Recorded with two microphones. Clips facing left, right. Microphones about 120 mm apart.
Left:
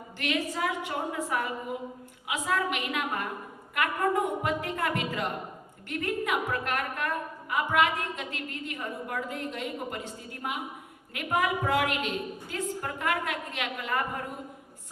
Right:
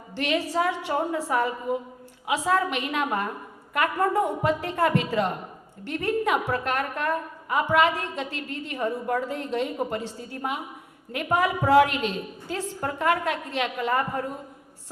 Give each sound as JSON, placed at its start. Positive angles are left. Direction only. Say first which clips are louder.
{"t": 0.2, "sound": "a woman's voice", "louder": "right 5 dB", "side_deg": -30}